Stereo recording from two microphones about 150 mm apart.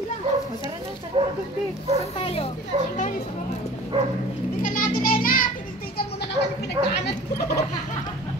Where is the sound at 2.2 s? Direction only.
40° left (ahead or behind).